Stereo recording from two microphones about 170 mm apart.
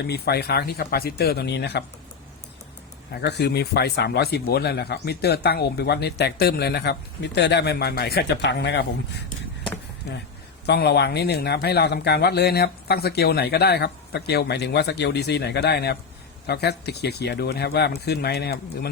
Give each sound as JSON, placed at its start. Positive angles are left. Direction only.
{"t": 0.0, "sound": "speech", "side_deg": 75}
{"t": 3.1, "sound": "speech", "side_deg": 70}
{"t": 10.7, "sound": "speech", "side_deg": 75}